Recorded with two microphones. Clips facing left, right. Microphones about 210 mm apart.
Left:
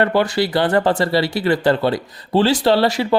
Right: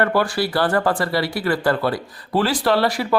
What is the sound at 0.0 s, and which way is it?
Speech, 20° left (ahead or behind).